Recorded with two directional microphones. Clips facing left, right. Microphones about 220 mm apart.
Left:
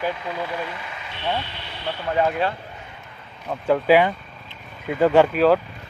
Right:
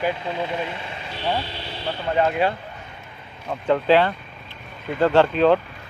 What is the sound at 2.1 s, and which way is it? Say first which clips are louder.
Speech: right 1 dB; 5° right (ahead or behind).